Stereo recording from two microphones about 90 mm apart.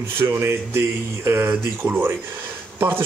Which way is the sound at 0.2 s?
25° right (ahead or behind).